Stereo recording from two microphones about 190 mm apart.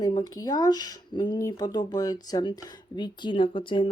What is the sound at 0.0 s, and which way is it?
Speech, 20° left (ahead or behind).